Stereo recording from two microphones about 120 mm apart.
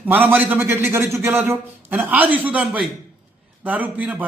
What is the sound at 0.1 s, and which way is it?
A man's voice, 15° right (ahead or behind).